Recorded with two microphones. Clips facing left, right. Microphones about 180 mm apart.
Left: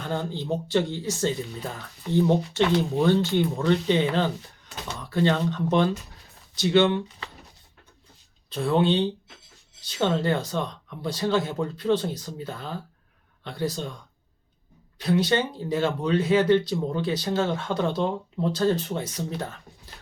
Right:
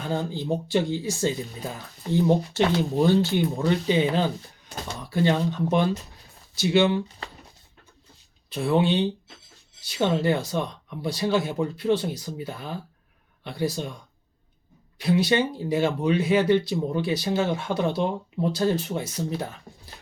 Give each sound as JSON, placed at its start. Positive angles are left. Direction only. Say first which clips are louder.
{"t": 0.0, "sound": "speech", "louder": "right 2 dB", "side_deg": -10}
{"t": 2.6, "sound": "speech", "louder": "even", "side_deg": -40}
{"t": 3.0, "sound": "speech", "louder": "right 2 dB", "side_deg": -10}
{"t": 8.4, "sound": "speech", "louder": "even", "side_deg": -10}